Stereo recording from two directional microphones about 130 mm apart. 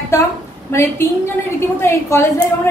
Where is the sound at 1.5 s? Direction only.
20° left (ahead or behind).